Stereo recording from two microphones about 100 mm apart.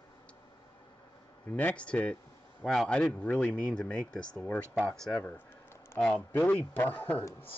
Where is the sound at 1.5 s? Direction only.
15° left (ahead or behind).